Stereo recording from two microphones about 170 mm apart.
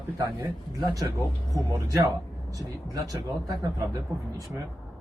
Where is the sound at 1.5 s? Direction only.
20° right (ahead or behind).